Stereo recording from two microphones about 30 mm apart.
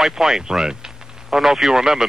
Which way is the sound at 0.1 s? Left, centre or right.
Centre.